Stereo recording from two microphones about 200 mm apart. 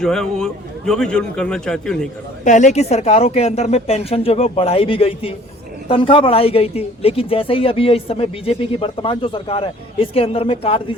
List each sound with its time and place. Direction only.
0.0 s a man's voice: 5° left (ahead or behind)
2.4 s a woman's voice: 35° left (ahead or behind)